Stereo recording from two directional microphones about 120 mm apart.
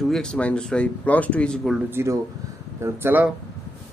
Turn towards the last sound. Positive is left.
turn(degrees=-20)  # may be behind; listen again after turning